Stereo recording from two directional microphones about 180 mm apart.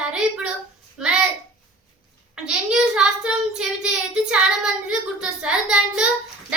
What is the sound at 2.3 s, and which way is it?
Child singing, 5° right (ahead or behind).